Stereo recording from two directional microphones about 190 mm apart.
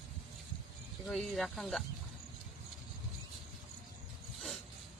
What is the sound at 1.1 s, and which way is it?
Speech, centre (ahead or behind).